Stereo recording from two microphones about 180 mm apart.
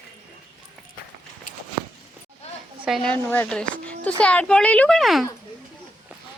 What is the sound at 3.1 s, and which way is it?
Speech, 10° left (ahead or behind).